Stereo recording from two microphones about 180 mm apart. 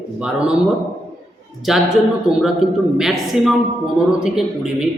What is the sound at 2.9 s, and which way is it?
A man's voice, centre (ahead or behind).